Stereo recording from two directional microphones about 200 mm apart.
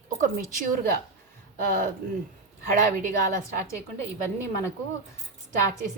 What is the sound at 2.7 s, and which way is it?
Speech, 40° right (ahead or behind).